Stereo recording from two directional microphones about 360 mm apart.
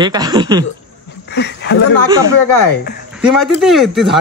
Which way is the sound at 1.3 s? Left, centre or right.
Left.